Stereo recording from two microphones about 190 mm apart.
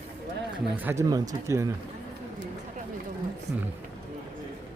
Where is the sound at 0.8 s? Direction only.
15° right (ahead or behind).